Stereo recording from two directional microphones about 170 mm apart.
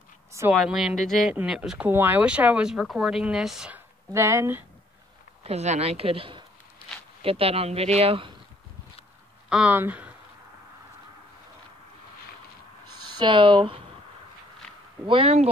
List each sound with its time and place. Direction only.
0.3 s speech: 15° right (ahead or behind)
0.6 s speech: 5° right (ahead or behind)
4.1 s speech: 15° right (ahead or behind)
5.4 s speech: 40° right (ahead or behind)
9.5 s speech: 10° right (ahead or behind)
13.2 s speech: 30° right (ahead or behind)
15.0 s speech: 35° right (ahead or behind)